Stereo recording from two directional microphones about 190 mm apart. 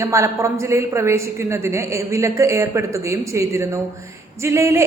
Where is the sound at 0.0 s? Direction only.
15° right (ahead or behind).